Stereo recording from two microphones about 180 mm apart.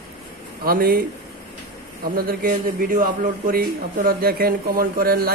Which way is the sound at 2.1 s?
55° right (ahead or behind).